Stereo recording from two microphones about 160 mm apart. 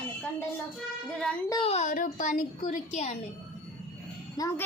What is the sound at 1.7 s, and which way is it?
Speech, 50° left (ahead or behind).